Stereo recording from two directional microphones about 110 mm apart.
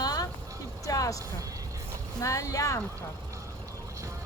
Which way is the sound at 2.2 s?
30° left (ahead or behind).